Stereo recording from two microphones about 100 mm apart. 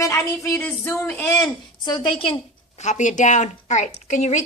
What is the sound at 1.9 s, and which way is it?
Speech, 50° left (ahead or behind).